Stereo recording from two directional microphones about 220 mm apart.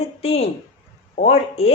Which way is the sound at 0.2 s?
25° left (ahead or behind).